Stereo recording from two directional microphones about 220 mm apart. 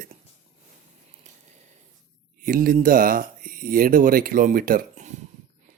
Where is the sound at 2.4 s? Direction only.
40° right (ahead or behind).